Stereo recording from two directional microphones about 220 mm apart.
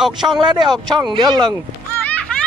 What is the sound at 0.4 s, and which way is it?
Speech, 20° right (ahead or behind).